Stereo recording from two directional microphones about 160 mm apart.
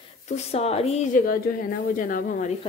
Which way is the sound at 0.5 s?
40° left (ahead or behind).